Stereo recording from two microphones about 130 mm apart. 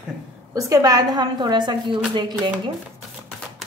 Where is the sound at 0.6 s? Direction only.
25° right (ahead or behind).